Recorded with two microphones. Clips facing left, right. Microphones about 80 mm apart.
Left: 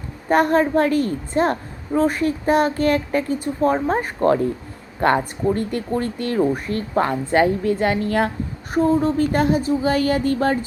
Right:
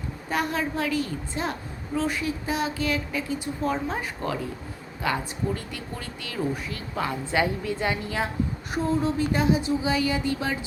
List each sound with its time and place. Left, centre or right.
0.3 s a woman's voice: left
8.7 s a woman's voice: left